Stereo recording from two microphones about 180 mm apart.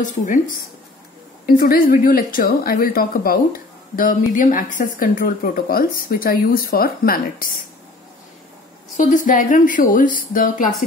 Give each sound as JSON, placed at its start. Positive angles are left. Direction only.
{"t": 0.0, "sound": "a woman's voice", "side_deg": 45}
{"t": 1.4, "sound": "a woman's voice", "side_deg": 55}
{"t": 8.9, "sound": "a woman's voice", "side_deg": 45}